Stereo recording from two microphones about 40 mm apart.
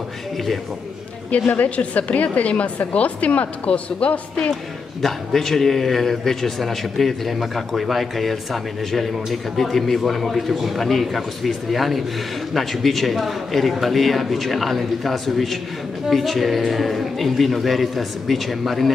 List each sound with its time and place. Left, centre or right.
1.3 s a woman's voice: left
5.0 s a man's voice: centre